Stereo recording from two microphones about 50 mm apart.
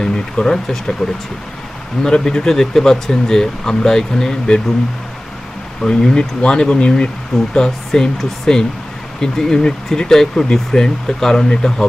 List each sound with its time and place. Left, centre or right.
0.0 s speech: centre
2.0 s speech: centre
5.8 s speech: centre